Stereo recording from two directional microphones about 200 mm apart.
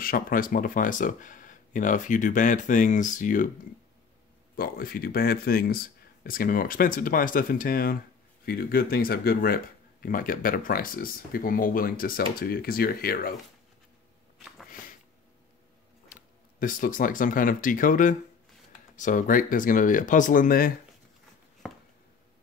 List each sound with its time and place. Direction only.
0.0 s speech: 45° left (ahead or behind)
4.6 s speech: 45° left (ahead or behind)
16.1 s speech: 45° left (ahead or behind)
21.6 s a sound: 5° left (ahead or behind)